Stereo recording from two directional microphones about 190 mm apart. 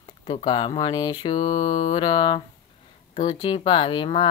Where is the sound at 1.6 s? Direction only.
40° left (ahead or behind).